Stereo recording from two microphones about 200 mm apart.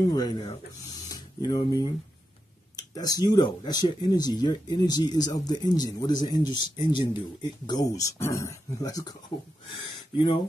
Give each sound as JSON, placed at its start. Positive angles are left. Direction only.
{"t": 0.1, "sound": "speech", "side_deg": 20}
{"t": 1.0, "sound": "a sound", "side_deg": 20}
{"t": 2.7, "sound": "speech", "side_deg": 20}
{"t": 10.1, "sound": "speech", "side_deg": 25}